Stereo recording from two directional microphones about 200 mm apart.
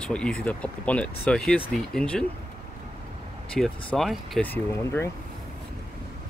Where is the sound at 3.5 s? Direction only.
5° left (ahead or behind).